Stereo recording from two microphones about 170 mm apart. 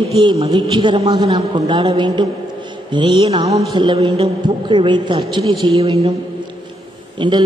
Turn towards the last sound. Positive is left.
turn(degrees=-30)  # may be behind; listen again after turning